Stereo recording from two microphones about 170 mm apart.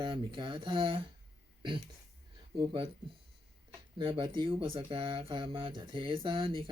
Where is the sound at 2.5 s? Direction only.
30° right (ahead or behind).